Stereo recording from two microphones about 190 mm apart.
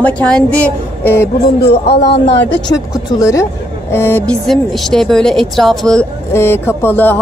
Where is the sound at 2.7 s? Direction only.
20° left (ahead or behind).